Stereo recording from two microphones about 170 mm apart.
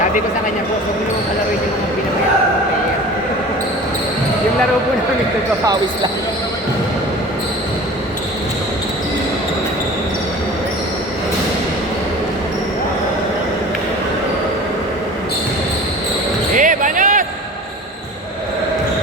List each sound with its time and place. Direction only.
16.6 s basketball bounce: 50° right (ahead or behind)